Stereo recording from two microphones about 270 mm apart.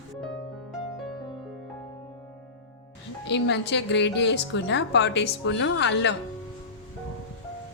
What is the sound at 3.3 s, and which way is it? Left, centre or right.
A woman's voice, left.